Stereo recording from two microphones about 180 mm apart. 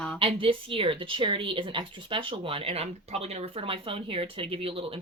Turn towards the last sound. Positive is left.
turn(degrees=-30)  # may be behind; listen again after turning